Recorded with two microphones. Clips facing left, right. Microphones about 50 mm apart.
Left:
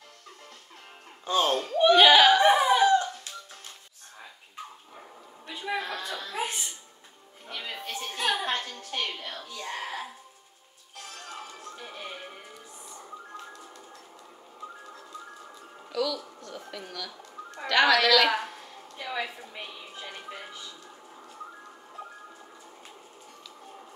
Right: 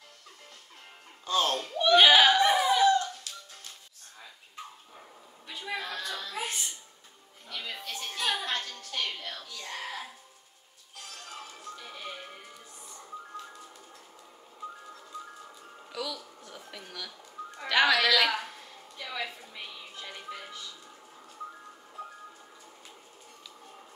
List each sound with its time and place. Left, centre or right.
1.2 s speech: centre
2.0 s a sound: centre
2.3 s dog: left
5.6 s music: left
11.1 s music: centre
11.7 s music: left
15.9 s music: centre
16.3 s a sound: centre
17.6 s music: centre
18.5 s a sound: centre
18.9 s music: centre